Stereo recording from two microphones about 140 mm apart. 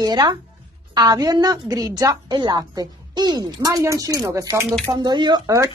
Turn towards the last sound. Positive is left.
turn(degrees=-25)  # may be behind; listen again after turning